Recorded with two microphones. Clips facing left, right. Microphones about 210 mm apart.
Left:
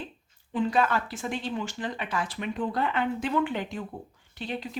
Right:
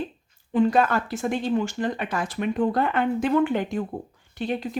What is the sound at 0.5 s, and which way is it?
Speech, 50° right (ahead or behind).